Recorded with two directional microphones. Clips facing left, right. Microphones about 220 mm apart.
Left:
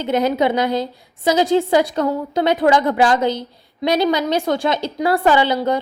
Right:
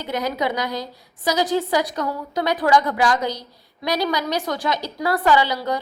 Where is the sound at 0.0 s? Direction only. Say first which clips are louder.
Left 7 dB; 25° left (ahead or behind).